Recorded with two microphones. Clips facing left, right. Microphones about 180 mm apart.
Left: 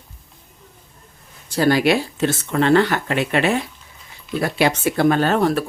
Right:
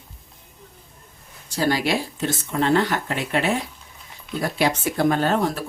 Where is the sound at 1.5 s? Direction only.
60° left (ahead or behind).